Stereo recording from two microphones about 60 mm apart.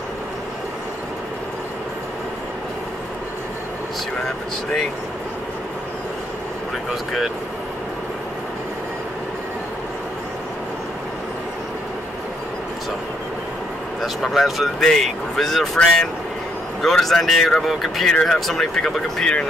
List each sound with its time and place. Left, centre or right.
14.0 s speech: centre